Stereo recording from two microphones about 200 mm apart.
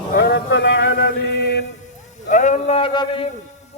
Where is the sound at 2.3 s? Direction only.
35° left (ahead or behind).